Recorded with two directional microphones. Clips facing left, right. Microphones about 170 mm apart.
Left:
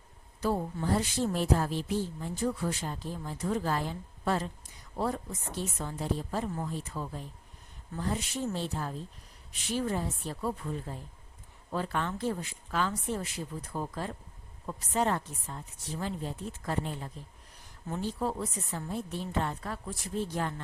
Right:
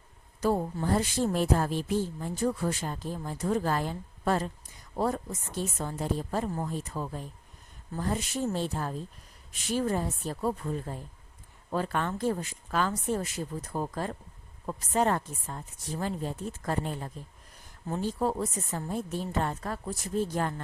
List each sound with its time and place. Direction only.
0.4 s a woman's voice: 45° right (ahead or behind)